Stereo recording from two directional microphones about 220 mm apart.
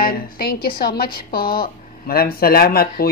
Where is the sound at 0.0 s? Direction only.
40° left (ahead or behind).